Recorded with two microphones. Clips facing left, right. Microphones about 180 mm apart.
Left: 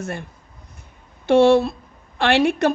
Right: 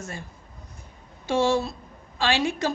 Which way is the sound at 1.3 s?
60° left (ahead or behind).